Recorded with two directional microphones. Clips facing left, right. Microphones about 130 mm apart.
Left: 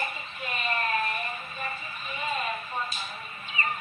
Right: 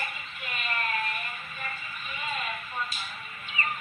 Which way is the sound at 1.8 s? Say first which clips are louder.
Left 3 dB; 40° left (ahead or behind).